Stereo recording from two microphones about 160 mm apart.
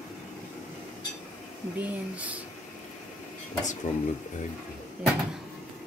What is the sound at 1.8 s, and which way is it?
Speech, 10° right (ahead or behind).